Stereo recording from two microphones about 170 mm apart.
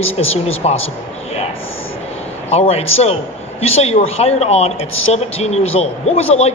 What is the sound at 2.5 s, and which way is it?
Speech, 35° left (ahead or behind).